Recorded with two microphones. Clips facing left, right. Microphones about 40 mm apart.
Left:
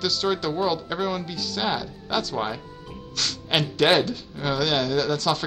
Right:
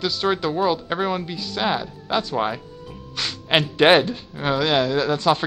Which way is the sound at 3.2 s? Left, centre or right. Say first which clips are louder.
Right 4 dB; right.